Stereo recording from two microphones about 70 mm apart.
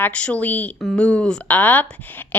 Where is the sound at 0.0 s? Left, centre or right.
Centre.